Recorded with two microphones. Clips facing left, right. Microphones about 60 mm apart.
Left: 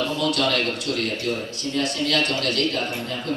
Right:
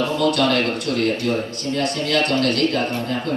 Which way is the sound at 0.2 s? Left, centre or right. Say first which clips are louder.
Right 5 dB; right.